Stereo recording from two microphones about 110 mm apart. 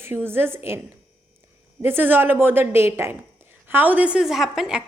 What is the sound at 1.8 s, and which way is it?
A woman's voice, 20° right (ahead or behind).